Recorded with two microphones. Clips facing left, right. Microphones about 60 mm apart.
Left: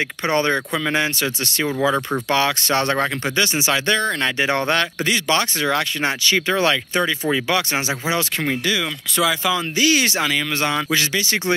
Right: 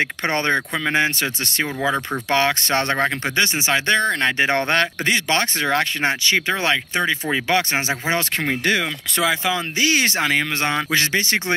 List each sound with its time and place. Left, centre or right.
0.2 s speech: right
9.2 s speech: right